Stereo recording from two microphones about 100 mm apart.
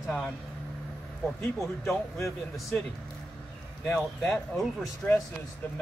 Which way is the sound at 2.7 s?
15° left (ahead or behind).